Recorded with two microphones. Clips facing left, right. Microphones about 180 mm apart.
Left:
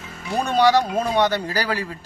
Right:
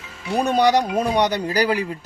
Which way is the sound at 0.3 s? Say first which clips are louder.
Even; 15° right (ahead or behind).